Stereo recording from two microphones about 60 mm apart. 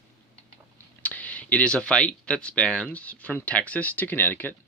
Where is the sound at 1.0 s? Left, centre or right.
Left.